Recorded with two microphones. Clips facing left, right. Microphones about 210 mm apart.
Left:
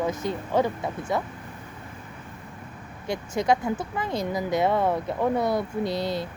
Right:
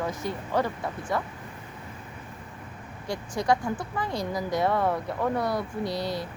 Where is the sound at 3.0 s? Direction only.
20° left (ahead or behind).